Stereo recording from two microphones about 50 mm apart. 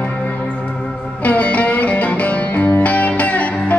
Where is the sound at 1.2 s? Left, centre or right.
Left.